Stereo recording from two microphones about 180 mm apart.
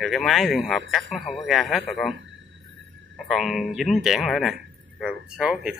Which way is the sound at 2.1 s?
90° right.